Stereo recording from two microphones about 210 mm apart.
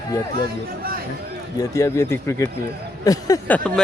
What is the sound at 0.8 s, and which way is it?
Speech, 45° right (ahead or behind).